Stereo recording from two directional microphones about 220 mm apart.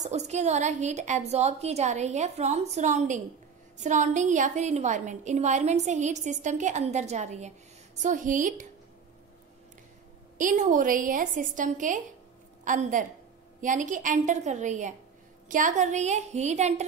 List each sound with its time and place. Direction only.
0.0 s a woman's voice: 30° right (ahead or behind)
10.3 s a woman's voice: 35° right (ahead or behind)